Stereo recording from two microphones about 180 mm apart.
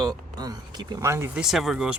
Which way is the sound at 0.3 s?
20° right (ahead or behind).